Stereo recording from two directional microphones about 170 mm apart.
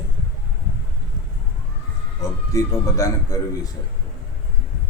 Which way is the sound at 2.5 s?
20° left (ahead or behind).